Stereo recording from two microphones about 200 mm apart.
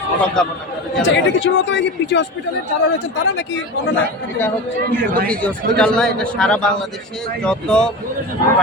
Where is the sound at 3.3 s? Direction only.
55° left (ahead or behind).